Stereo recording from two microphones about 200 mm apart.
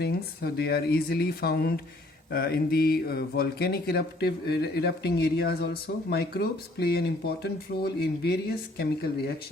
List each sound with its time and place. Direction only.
0.0 s speech: 55° left (ahead or behind)